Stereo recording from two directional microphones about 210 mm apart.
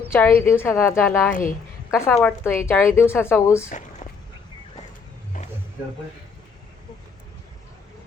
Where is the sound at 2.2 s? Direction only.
10° left (ahead or behind).